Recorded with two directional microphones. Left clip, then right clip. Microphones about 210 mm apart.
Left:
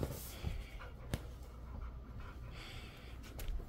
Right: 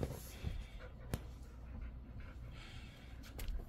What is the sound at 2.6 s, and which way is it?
Gasp, 25° left (ahead or behind).